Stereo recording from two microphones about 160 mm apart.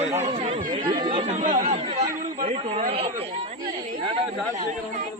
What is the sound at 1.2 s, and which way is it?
Speech, 50° right (ahead or behind).